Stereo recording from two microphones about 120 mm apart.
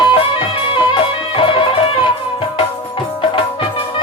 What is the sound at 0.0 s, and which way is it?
Music, 45° left (ahead or behind).